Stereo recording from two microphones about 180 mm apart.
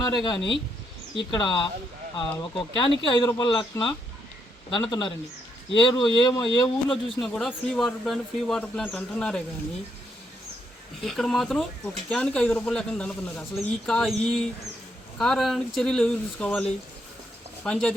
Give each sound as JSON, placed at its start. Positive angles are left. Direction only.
{"t": 0.0, "sound": "speech", "side_deg": 25}
{"t": 6.8, "sound": "speech", "side_deg": 5}
{"t": 11.0, "sound": "speech", "side_deg": 0}